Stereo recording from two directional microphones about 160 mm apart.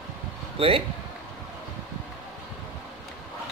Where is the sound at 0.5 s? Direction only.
35° right (ahead or behind).